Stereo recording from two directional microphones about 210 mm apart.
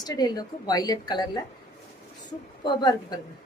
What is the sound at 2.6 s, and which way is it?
Speech, 20° left (ahead or behind).